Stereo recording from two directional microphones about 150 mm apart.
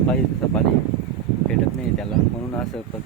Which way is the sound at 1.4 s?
5° left (ahead or behind).